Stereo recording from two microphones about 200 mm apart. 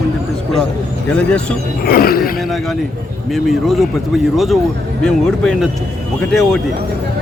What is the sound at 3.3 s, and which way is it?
Speech, centre (ahead or behind).